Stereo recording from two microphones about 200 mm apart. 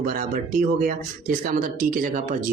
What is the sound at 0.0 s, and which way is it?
Speech, 45° right (ahead or behind).